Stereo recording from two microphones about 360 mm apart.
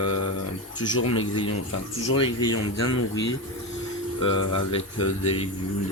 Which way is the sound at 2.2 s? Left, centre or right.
Centre.